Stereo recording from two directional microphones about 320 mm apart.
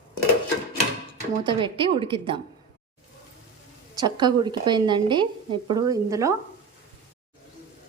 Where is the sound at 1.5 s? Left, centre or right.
Centre.